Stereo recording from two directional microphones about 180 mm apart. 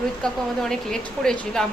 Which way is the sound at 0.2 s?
5° left (ahead or behind).